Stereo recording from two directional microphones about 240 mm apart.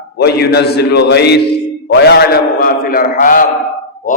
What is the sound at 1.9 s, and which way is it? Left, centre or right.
Mantra, left.